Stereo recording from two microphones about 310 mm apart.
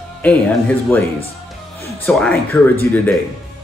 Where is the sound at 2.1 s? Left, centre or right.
Centre.